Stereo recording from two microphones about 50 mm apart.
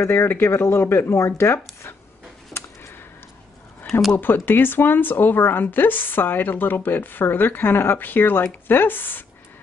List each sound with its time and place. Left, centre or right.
0.0 s speech: left
1.2 s speech: left
3.9 s speech: left